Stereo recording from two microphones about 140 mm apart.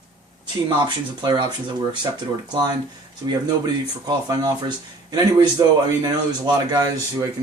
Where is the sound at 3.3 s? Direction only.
30° right (ahead or behind).